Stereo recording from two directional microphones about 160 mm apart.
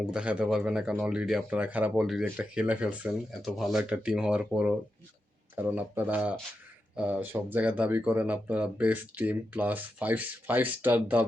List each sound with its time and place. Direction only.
0.0 s speech: 5° right (ahead or behind)